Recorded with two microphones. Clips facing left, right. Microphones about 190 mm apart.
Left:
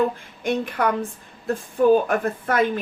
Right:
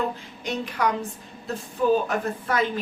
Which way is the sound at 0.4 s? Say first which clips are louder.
Left 4 dB; 55° left (ahead or behind).